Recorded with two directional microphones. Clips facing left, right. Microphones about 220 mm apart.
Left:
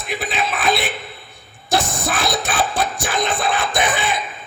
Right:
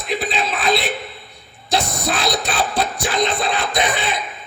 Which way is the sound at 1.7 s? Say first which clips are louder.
Even; 50° left (ahead or behind).